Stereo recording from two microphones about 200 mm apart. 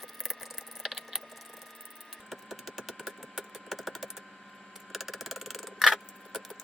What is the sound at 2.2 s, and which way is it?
Wood, centre (ahead or behind).